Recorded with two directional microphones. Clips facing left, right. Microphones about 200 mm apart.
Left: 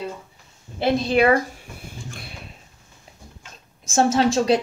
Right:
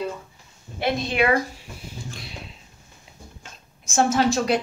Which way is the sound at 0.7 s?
30° left (ahead or behind).